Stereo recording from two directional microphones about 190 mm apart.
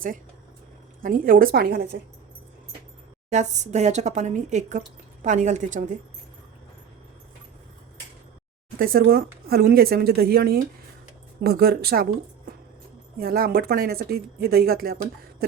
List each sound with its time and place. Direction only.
1.0 s a woman's voice: 45° right (ahead or behind)
3.2 s speech: 35° right (ahead or behind)
8.8 s a woman's voice: 50° right (ahead or behind)
13.1 s a woman's voice: 50° right (ahead or behind)